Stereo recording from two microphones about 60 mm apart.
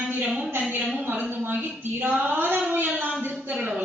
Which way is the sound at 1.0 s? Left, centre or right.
Right.